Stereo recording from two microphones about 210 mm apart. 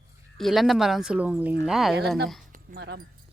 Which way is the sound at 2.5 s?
50° right (ahead or behind).